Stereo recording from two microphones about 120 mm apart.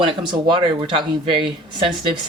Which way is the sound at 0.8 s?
45° right (ahead or behind).